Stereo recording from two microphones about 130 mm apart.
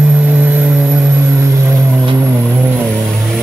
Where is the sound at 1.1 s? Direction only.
20° right (ahead or behind).